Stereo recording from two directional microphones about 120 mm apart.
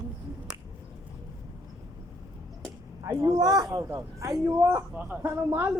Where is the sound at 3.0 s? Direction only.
30° right (ahead or behind).